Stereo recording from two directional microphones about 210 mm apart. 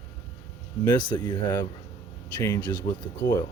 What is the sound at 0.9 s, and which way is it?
Speech, 20° left (ahead or behind).